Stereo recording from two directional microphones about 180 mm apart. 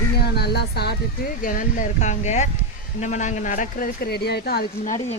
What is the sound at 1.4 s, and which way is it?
Speech, 50° left (ahead or behind).